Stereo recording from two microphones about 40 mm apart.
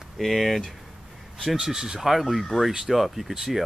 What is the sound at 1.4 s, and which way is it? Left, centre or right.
Speech, centre.